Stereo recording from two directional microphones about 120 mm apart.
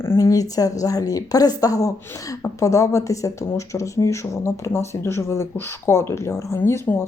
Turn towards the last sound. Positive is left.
turn(degrees=20)  # may be behind; listen again after turning